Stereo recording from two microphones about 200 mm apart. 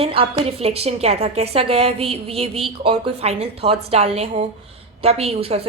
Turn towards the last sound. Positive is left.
turn(degrees=-30)  # may be behind; listen again after turning